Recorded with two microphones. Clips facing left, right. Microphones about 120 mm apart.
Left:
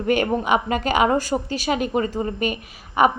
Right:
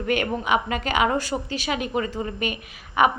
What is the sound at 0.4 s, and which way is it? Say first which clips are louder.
A woman's voice: left 3 dB; 35° left (ahead or behind).